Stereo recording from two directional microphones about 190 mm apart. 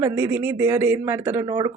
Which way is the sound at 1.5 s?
25° right (ahead or behind).